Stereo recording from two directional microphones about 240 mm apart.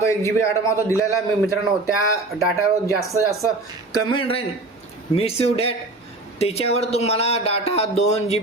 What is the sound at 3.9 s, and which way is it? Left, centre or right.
Speech, centre.